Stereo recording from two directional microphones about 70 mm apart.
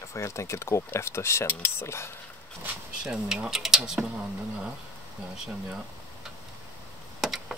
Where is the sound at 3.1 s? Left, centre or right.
Centre.